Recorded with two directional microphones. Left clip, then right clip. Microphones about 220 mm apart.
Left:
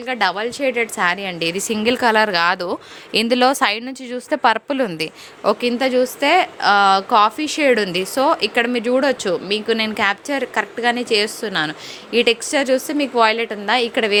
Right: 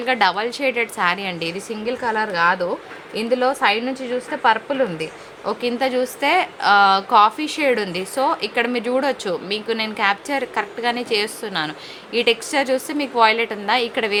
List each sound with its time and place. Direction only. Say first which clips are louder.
0.0 s a woman's voice: right 1 dB; 25° left (ahead or behind); by 5.0 s 55° left (ahead or behind)
5.4 s a woman's voice: left 4 dB; 35° left (ahead or behind)